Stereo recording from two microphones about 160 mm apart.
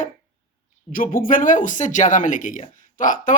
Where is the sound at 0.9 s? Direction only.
60° left (ahead or behind).